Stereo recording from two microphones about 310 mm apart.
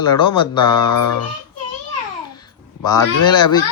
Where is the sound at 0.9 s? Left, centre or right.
Left.